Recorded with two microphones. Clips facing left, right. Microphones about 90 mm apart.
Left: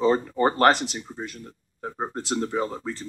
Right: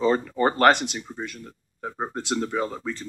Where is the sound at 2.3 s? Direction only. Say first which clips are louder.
Even; 5° left (ahead or behind).